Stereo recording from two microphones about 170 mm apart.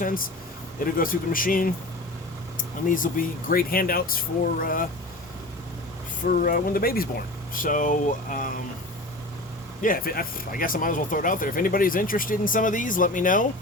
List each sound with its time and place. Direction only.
0.0 s speech: 55° left (ahead or behind)
6.2 s speech: 55° left (ahead or behind)
9.8 s speech: 60° left (ahead or behind)